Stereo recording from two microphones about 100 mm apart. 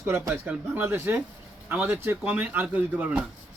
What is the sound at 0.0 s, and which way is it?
Speech, 20° right (ahead or behind).